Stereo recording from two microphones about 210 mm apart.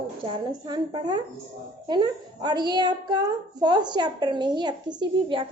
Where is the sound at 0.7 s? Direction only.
20° right (ahead or behind).